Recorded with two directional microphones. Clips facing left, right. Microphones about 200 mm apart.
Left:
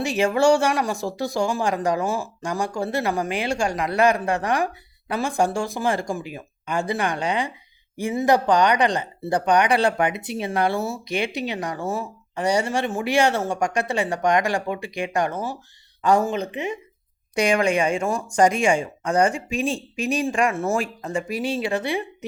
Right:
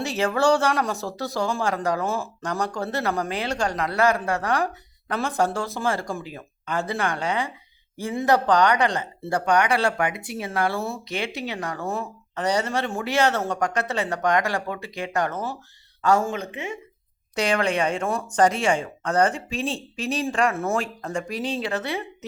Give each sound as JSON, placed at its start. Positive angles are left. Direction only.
{"t": 0.0, "sound": "speech", "side_deg": 15}